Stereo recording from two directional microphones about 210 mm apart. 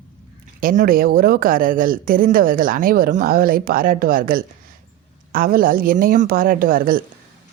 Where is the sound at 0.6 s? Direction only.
40° right (ahead or behind).